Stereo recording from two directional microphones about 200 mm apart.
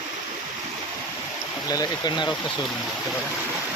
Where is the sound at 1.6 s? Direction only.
20° left (ahead or behind).